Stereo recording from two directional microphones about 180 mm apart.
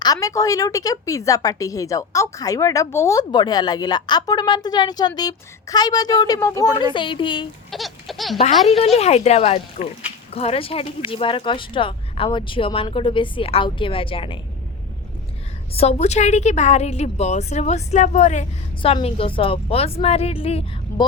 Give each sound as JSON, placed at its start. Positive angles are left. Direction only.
{"t": 0.0, "sound": "a woman's voice", "side_deg": 20}
{"t": 7.7, "sound": "a sound", "side_deg": 0}
{"t": 8.6, "sound": "a woman's voice", "side_deg": 35}
{"t": 15.7, "sound": "a woman's voice", "side_deg": 35}